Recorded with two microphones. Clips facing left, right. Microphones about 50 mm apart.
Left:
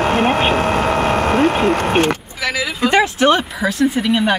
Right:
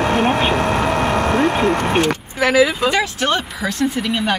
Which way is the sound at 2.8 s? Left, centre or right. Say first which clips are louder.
Left 3 dB; left.